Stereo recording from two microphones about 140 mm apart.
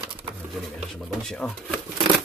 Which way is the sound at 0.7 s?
5° left (ahead or behind).